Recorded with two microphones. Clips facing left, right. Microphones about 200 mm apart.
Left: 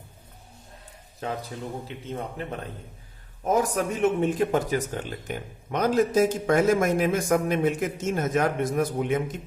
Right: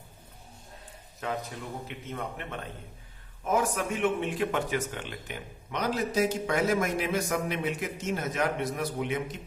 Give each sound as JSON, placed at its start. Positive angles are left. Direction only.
{"t": 1.2, "sound": "a man's voice", "side_deg": 30}